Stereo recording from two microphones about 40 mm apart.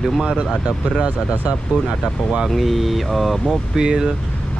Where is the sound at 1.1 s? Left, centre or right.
Right.